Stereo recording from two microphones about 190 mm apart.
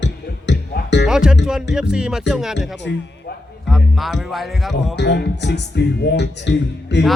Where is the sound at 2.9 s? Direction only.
70° left (ahead or behind).